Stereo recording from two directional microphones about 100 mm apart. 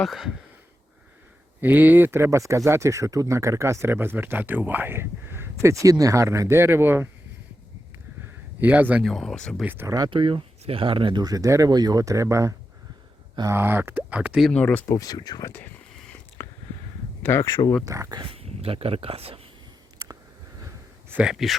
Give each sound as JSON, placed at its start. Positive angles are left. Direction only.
{"t": 0.0, "sound": "speech", "side_deg": -5}
{"t": 1.6, "sound": "speech", "side_deg": -15}
{"t": 8.6, "sound": "speech", "side_deg": -15}
{"t": 9.0, "sound": "speech", "side_deg": 5}
{"t": 9.6, "sound": "speech", "side_deg": -20}
{"t": 10.1, "sound": "speech", "side_deg": -55}
{"t": 13.5, "sound": "speech", "side_deg": -20}
{"t": 14.5, "sound": "speech", "side_deg": 15}
{"t": 14.8, "sound": "speech", "side_deg": 40}
{"t": 16.4, "sound": "a sound", "side_deg": 25}
{"t": 17.4, "sound": "speech", "side_deg": 45}
{"t": 17.8, "sound": "speech", "side_deg": -35}
{"t": 18.2, "sound": "speech", "side_deg": -70}
{"t": 21.2, "sound": "speech", "side_deg": 0}